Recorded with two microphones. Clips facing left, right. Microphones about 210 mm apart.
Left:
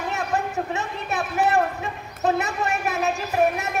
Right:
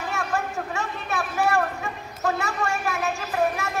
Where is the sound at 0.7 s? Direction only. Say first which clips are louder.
Left 1 dB; 20° left (ahead or behind).